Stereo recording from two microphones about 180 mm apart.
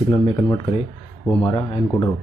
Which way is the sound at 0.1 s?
25° left (ahead or behind).